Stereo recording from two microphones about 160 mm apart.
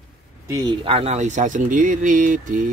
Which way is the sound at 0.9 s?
45° right (ahead or behind).